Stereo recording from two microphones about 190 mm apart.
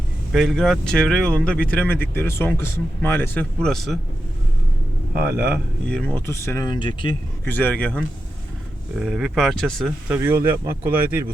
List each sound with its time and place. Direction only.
0.3 s speech: centre (ahead or behind)
5.8 s speech: 5° left (ahead or behind)
6.7 s speech: 25° left (ahead or behind)
7.4 s speech: 10° left (ahead or behind)
9.0 s speech: 5° right (ahead or behind)
10.1 s speech: 10° right (ahead or behind)